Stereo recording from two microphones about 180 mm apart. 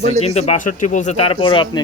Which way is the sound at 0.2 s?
35° left (ahead or behind).